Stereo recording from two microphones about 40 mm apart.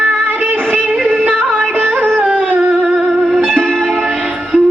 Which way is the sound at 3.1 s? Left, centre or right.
Centre.